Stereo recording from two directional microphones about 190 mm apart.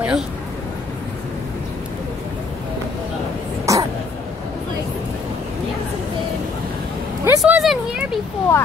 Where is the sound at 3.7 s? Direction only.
15° right (ahead or behind).